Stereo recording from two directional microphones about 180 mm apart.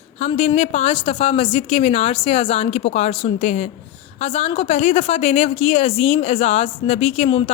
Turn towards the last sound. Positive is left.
turn(degrees=30)  # may be behind; listen again after turning